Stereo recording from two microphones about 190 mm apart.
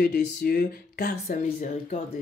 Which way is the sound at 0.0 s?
60° left (ahead or behind).